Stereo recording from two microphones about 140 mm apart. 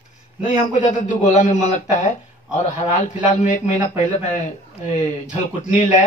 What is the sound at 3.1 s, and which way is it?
Speech, 60° left (ahead or behind).